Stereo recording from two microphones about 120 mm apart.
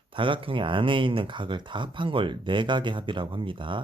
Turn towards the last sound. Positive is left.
turn(degrees=-45)  # may be behind; listen again after turning